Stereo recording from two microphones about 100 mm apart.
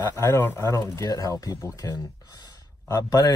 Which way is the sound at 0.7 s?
30° left (ahead or behind).